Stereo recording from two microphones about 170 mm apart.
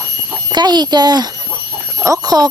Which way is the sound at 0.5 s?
25° right (ahead or behind).